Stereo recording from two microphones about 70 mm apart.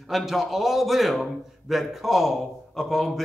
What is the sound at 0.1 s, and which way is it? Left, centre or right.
A man's voice, centre.